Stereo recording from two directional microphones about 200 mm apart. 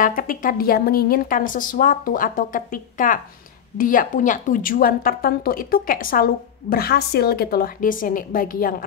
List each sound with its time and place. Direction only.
0.0 s a woman's voice: 45° left (ahead or behind)